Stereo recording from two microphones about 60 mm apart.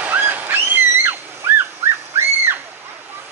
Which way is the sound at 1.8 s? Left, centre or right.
Right.